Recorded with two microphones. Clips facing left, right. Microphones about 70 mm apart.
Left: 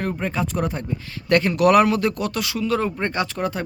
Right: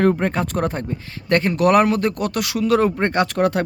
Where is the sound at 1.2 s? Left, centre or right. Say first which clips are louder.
Even; right.